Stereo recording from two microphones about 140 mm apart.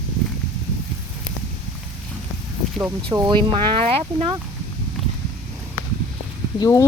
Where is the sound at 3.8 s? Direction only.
45° right (ahead or behind).